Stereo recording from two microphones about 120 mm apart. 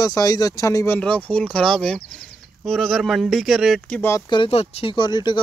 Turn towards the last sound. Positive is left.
turn(degrees=40)  # may be behind; listen again after turning